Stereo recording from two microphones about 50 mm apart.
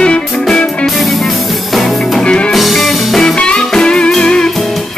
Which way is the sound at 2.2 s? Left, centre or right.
Left.